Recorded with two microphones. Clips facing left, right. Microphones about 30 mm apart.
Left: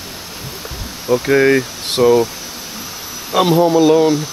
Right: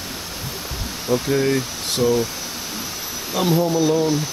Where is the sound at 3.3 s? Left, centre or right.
Left.